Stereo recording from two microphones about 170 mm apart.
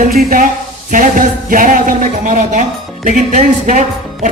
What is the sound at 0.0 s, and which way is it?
A woman's voice, 55° right (ahead or behind).